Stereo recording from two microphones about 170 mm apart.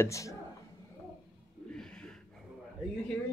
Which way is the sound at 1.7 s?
5° left (ahead or behind).